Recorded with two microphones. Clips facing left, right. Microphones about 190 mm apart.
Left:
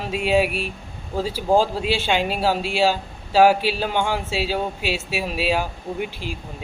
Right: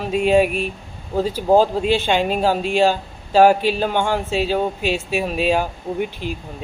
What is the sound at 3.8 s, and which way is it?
Speech, 50° right (ahead or behind).